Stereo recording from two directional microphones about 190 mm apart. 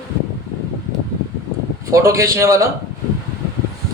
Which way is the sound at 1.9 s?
15° right (ahead or behind).